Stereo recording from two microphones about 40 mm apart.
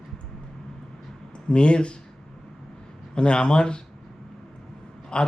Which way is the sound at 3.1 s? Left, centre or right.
Left.